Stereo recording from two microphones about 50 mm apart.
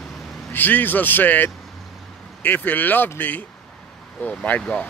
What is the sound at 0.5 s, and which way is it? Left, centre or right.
Speech, left.